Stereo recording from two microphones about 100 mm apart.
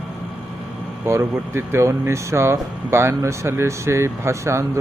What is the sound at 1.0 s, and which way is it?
Speech, 25° right (ahead or behind).